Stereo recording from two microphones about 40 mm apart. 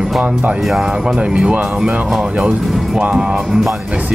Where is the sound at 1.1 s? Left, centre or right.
Right.